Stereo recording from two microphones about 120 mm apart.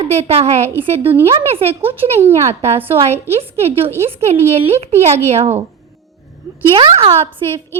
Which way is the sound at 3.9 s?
20° right (ahead or behind).